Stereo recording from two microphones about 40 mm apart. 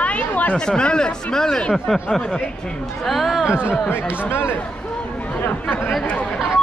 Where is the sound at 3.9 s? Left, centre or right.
Left.